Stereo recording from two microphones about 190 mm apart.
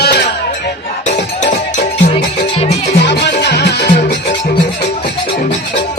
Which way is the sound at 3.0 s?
65° left (ahead or behind).